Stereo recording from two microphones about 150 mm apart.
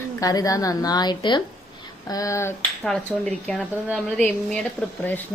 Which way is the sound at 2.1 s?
20° left (ahead or behind).